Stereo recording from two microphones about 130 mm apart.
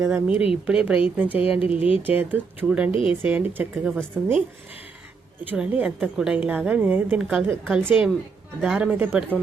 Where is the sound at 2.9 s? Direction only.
45° left (ahead or behind).